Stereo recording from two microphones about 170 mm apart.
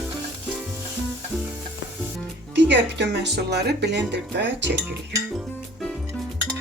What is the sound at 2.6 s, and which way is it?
Speech, 90° right.